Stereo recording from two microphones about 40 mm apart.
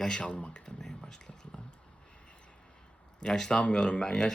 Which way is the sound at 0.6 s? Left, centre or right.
Centre.